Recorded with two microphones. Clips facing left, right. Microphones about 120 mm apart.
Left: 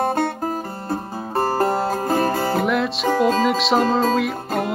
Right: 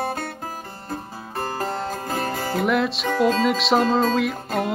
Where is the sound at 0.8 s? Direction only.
40° left (ahead or behind).